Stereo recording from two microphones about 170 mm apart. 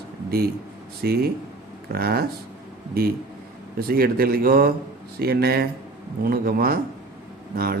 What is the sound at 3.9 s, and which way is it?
Speech, 60° right (ahead or behind).